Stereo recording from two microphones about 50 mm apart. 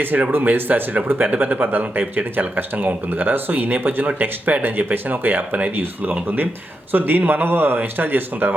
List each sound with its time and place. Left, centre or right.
0.0 s speech: right